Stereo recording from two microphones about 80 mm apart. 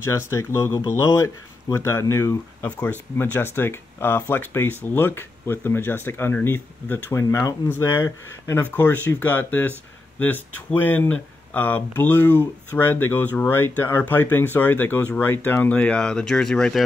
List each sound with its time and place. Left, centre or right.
0.0 s speech: left
2.6 s speech: left
8.7 s speech: left